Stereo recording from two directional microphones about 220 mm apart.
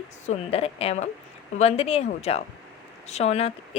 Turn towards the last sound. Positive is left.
turn(degrees=30)  # may be behind; listen again after turning